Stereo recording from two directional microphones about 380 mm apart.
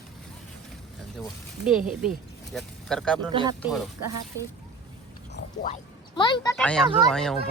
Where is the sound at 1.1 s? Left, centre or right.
Centre.